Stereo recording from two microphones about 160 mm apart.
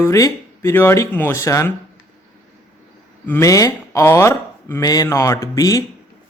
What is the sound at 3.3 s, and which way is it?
Speech, 20° left (ahead or behind).